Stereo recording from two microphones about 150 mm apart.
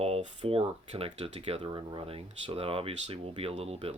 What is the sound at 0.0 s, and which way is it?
Speech, 40° right (ahead or behind).